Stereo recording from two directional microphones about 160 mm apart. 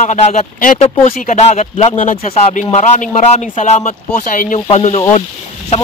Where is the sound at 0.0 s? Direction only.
45° left (ahead or behind).